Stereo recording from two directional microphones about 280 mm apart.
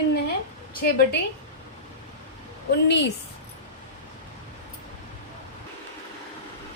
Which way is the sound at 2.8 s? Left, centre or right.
Left.